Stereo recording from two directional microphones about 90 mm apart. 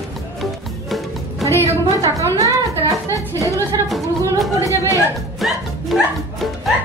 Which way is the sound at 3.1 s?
35° left (ahead or behind).